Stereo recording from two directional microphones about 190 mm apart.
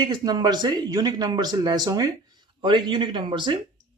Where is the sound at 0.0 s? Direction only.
20° right (ahead or behind).